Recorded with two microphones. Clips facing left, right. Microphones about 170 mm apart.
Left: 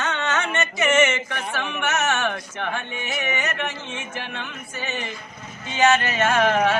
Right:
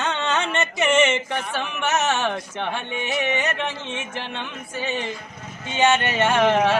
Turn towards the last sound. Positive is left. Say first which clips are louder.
# right 1 dB
turn(degrees=-25)  # may be behind; listen again after turning